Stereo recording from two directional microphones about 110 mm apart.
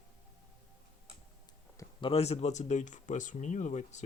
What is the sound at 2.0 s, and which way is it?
Speech, 65° left (ahead or behind).